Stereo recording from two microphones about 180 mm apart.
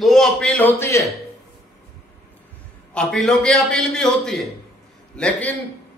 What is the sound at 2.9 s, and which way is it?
A man's voice, 5° left (ahead or behind).